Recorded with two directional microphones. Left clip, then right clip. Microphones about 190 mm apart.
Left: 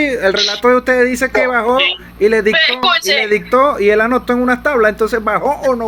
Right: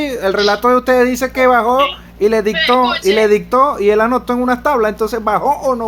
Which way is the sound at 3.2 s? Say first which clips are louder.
Even; 10° right (ahead or behind).